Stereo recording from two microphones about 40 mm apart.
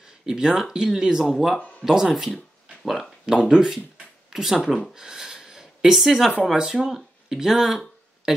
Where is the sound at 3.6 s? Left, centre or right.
Centre.